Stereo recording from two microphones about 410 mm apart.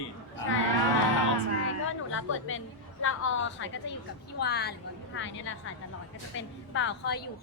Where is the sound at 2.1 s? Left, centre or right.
Left.